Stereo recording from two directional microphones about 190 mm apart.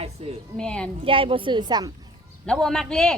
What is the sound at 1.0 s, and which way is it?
Speech, 30° right (ahead or behind).